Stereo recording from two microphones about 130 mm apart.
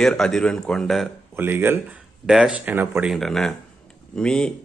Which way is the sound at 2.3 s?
5° right (ahead or behind).